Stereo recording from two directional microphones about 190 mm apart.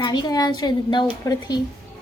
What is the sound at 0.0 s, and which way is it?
A woman's voice, 20° left (ahead or behind).